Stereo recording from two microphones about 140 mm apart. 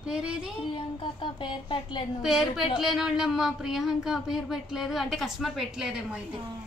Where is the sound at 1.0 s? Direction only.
35° left (ahead or behind).